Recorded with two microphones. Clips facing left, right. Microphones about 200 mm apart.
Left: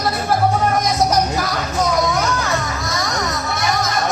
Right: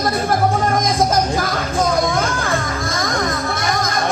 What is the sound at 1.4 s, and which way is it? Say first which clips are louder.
Music: right 1 dB; 50° right (ahead or behind).